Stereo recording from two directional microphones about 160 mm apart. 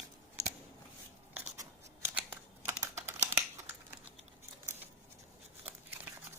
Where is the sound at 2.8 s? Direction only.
20° right (ahead or behind).